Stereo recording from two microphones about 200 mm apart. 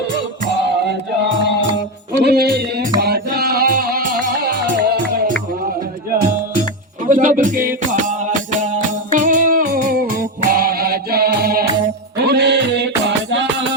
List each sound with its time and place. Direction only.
2.2 s music: 55° right (ahead or behind)
7.1 s music: 45° right (ahead or behind)
9.1 s music: 40° right (ahead or behind); by 13.7 s 60° right (ahead or behind)